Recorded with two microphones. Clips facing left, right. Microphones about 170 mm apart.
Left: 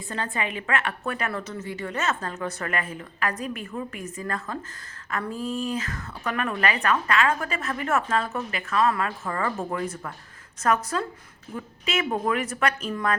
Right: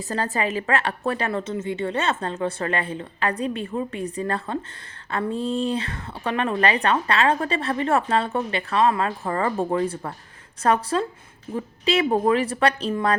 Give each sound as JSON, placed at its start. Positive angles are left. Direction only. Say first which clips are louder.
{"t": 0.1, "sound": "a woman's voice", "louder": "right 5 dB", "side_deg": -35}